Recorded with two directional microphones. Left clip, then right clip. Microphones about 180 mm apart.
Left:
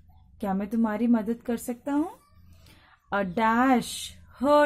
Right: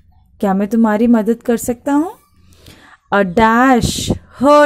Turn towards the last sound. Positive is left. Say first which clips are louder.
# right 12 dB
turn(degrees=-35)  # may be behind; listen again after turning